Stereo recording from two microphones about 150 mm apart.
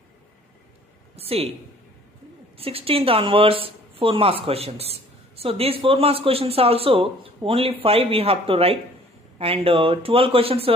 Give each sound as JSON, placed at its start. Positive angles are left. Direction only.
{"t": 1.1, "sound": "a woman's voice", "side_deg": -40}
{"t": 2.5, "sound": "speech", "side_deg": -40}